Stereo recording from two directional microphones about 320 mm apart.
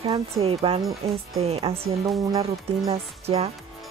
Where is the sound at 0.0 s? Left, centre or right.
Centre.